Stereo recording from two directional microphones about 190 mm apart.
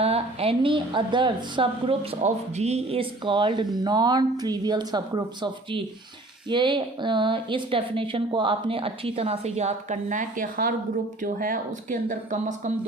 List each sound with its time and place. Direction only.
0.0 s a woman's voice: 30° right (ahead or behind)